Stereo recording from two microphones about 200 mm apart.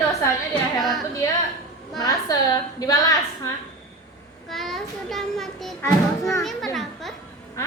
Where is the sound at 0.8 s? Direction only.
Centre (ahead or behind).